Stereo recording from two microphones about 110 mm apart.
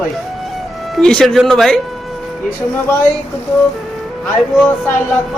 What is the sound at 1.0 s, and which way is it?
Speech, 5° left (ahead or behind).